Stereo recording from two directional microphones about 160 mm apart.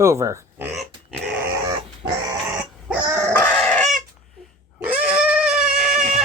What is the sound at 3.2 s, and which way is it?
Chicken, 5° left (ahead or behind).